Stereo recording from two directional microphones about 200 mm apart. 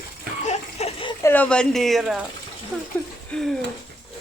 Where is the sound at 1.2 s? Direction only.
10° left (ahead or behind).